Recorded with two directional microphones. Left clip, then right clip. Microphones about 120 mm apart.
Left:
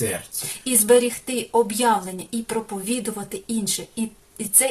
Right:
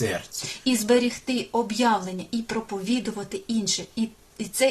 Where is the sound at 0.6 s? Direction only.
20° left (ahead or behind).